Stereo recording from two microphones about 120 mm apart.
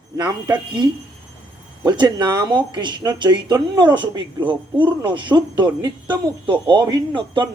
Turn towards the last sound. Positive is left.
turn(degrees=-40)  # may be behind; listen again after turning